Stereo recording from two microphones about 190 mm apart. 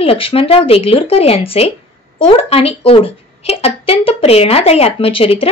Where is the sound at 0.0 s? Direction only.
30° left (ahead or behind).